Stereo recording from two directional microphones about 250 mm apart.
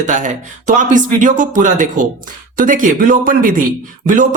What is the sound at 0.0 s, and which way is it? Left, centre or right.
Speech, right.